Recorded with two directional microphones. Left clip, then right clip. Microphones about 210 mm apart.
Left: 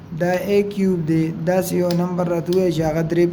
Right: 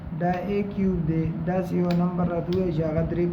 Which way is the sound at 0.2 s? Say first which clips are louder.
Left 8 dB; 50° left (ahead or behind).